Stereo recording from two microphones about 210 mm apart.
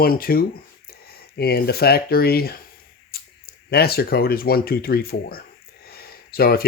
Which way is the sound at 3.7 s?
50° left (ahead or behind).